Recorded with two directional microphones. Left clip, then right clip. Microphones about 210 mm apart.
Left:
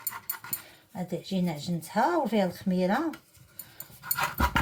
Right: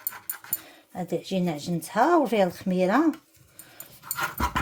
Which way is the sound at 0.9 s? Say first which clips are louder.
Right 5 dB; 50° right (ahead or behind).